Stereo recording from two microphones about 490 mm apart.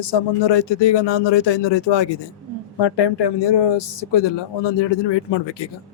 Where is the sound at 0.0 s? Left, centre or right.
Left.